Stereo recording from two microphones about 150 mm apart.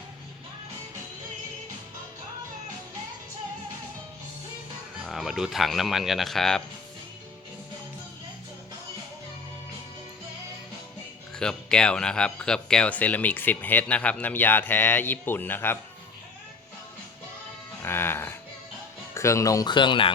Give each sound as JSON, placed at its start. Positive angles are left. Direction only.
{"t": 5.0, "sound": "speech", "side_deg": 0}
{"t": 11.3, "sound": "speech", "side_deg": 5}
{"t": 17.8, "sound": "music", "side_deg": 15}
{"t": 19.1, "sound": "speech", "side_deg": 20}